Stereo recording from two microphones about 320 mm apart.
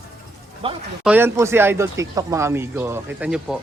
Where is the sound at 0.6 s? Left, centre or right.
Centre.